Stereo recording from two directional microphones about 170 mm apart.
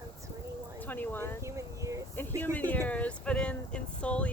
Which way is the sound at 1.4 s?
15° right (ahead or behind).